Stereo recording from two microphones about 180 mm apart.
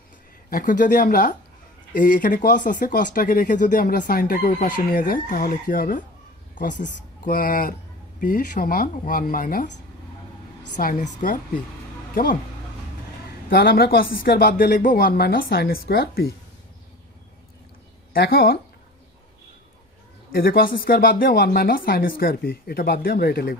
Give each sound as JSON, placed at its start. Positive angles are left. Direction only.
{"t": 0.5, "sound": "speech", "side_deg": 50}
{"t": 10.8, "sound": "speech", "side_deg": 50}
{"t": 13.5, "sound": "speech", "side_deg": 55}
{"t": 18.1, "sound": "speech", "side_deg": 60}
{"t": 20.3, "sound": "speech", "side_deg": 55}